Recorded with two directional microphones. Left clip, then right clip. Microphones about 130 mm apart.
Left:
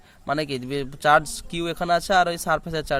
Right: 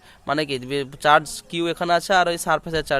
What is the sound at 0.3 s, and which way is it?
Speech, 15° left (ahead or behind).